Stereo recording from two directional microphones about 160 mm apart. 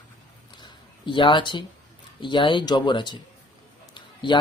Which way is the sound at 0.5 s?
30° left (ahead or behind).